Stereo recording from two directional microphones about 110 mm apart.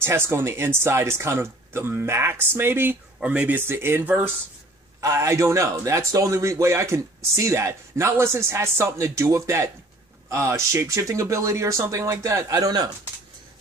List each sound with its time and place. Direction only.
0.0 s speech: 20° right (ahead or behind)
5.0 s speech: 25° right (ahead or behind)